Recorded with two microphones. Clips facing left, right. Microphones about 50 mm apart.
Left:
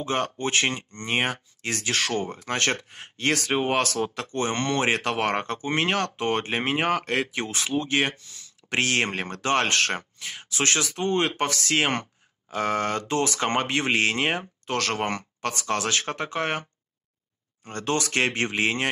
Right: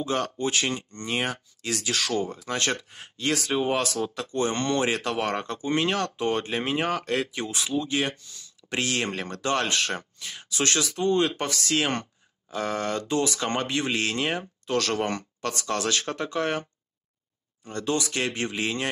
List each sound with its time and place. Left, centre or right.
0.0 s speech: left
17.6 s speech: left